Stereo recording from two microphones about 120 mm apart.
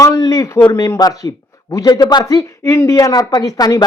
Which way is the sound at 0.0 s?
30° left (ahead or behind).